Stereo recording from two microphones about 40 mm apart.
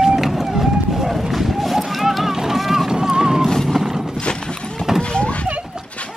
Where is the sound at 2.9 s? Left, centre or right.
Centre.